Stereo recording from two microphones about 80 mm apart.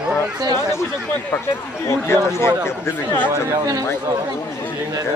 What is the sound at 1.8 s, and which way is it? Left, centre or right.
Speech, left.